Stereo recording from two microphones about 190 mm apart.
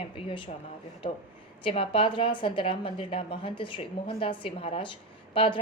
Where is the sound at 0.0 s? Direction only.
25° left (ahead or behind).